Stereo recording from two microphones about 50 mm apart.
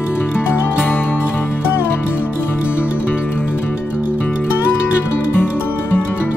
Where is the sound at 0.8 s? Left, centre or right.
Left.